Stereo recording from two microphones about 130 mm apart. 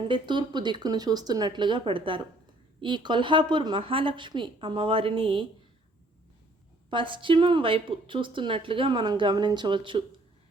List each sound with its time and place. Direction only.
0.1 s a woman's voice: 35° right (ahead or behind)
6.9 s a woman's voice: 40° right (ahead or behind)